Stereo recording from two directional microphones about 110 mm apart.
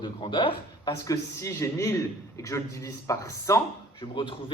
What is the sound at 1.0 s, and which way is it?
Speech, 30° left (ahead or behind).